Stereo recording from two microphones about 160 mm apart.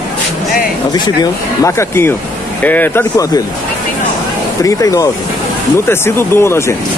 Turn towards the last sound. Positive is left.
turn(degrees=15)  # may be behind; listen again after turning